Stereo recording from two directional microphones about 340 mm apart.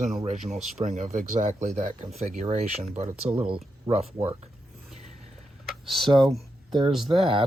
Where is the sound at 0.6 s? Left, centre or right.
Right.